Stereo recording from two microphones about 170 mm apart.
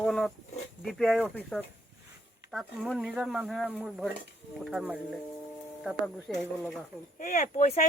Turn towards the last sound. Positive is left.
turn(degrees=45)  # may be behind; listen again after turning